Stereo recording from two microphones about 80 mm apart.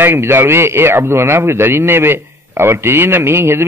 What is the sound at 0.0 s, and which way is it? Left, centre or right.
A man's voice, right.